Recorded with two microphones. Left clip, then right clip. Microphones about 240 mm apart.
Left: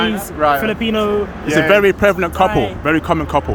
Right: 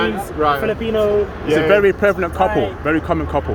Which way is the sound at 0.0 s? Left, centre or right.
Centre.